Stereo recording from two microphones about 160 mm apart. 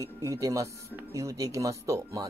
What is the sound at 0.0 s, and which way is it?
Speech, 20° right (ahead or behind).